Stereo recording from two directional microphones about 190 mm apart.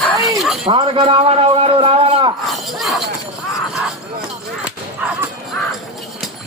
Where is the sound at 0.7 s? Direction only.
25° right (ahead or behind).